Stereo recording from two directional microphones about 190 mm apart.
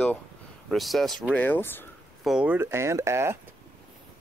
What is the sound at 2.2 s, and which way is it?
Speech, 5° right (ahead or behind).